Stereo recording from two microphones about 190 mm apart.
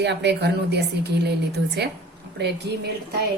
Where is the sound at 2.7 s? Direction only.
70° right (ahead or behind).